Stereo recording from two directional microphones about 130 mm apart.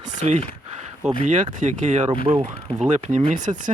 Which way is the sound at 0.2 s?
65° right (ahead or behind).